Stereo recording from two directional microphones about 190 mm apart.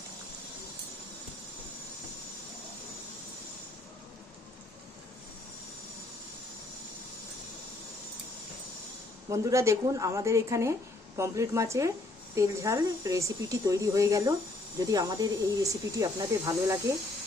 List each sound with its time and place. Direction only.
9.3 s speech: 15° right (ahead or behind)